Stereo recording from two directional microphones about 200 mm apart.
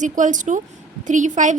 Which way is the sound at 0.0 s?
40° right (ahead or behind).